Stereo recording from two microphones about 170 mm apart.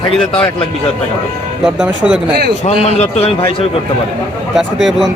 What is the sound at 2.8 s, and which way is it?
Speech, 35° left (ahead or behind).